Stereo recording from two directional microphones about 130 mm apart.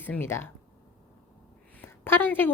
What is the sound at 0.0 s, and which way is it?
Speech, 15° left (ahead or behind).